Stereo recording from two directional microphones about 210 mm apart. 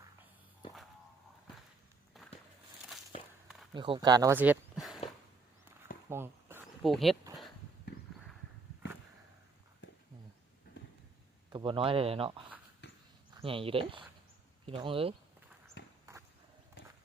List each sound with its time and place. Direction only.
3.8 s speech: 20° right (ahead or behind); by 4.9 s 5° right (ahead or behind)
6.1 s a sound: 10° right (ahead or behind)
6.8 s speech: centre (ahead or behind)
11.5 s speech: 25° right (ahead or behind)
12.8 s basketball bounce: 55° left (ahead or behind)
13.3 s speech: 25° right (ahead or behind)